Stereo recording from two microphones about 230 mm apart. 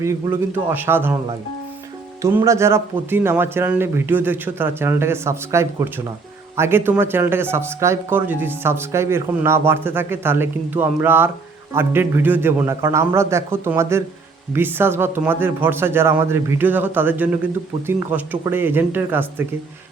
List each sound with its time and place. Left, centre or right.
0.0 s speech: centre
2.2 s speech: centre